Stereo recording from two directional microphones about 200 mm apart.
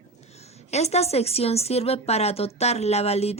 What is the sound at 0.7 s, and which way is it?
Speech, 35° left (ahead or behind).